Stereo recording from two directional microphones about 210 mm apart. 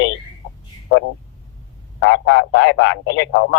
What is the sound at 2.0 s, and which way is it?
Speech, 60° left (ahead or behind).